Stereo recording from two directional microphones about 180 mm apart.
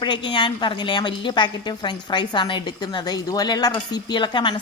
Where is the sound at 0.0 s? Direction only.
25° left (ahead or behind).